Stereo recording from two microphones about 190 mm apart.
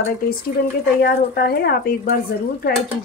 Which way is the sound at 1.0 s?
55° left (ahead or behind).